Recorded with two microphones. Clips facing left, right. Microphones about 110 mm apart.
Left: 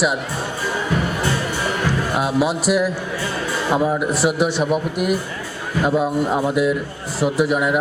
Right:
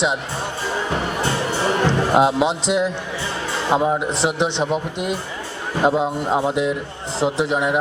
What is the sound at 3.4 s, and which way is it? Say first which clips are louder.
A man's voice: right 1 dB; 25° right (ahead or behind).